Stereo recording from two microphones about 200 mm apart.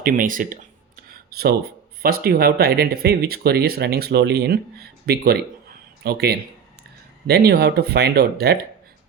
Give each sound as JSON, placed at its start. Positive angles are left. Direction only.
{"t": 0.0, "sound": "speech", "side_deg": -45}